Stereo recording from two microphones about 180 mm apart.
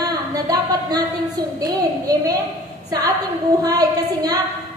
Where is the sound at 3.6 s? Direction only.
20° right (ahead or behind).